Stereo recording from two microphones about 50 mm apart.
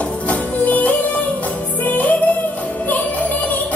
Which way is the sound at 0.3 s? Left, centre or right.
Left.